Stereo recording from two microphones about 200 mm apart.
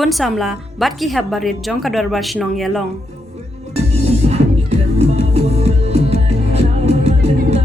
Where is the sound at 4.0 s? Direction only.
35° right (ahead or behind).